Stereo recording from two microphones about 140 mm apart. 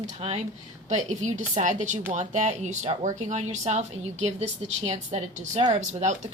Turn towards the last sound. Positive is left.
turn(degrees=-55)  # may be behind; listen again after turning